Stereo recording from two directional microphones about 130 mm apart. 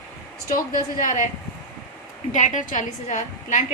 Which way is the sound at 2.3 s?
70° left (ahead or behind).